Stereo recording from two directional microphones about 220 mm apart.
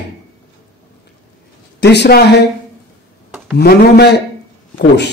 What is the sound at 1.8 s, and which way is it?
Speech, 50° left (ahead or behind).